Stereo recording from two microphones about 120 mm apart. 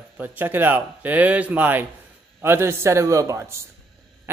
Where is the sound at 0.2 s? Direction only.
15° right (ahead or behind).